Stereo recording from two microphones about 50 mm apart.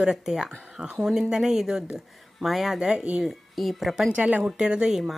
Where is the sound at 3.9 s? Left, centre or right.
Centre.